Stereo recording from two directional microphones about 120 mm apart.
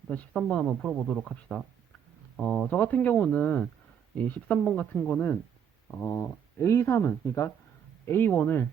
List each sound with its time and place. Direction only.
0.1 s speech: 10° left (ahead or behind)